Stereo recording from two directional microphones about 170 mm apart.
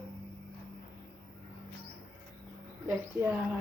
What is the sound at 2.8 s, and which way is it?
Speech, 10° right (ahead or behind).